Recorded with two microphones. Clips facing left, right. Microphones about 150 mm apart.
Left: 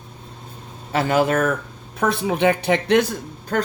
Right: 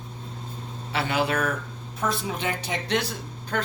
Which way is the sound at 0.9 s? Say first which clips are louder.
Left 7 dB; 45° left (ahead or behind).